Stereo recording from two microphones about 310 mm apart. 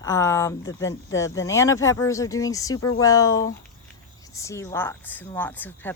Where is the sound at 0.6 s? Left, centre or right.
Left.